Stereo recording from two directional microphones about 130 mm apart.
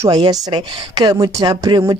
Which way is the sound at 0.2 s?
35° right (ahead or behind).